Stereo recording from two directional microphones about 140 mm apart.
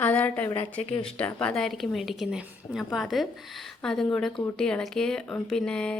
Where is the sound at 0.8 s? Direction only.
45° left (ahead or behind).